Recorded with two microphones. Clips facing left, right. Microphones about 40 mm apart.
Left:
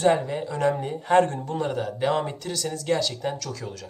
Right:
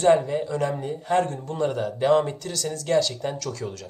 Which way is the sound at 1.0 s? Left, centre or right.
Left.